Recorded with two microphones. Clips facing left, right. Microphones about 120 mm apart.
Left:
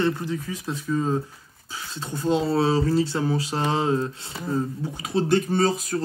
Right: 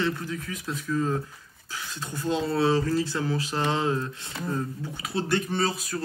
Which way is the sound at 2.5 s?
30° left (ahead or behind).